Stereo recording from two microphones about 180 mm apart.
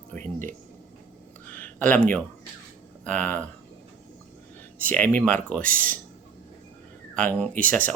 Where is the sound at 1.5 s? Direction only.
10° left (ahead or behind).